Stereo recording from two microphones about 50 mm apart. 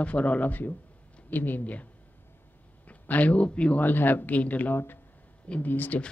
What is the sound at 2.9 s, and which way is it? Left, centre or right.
Speech, left.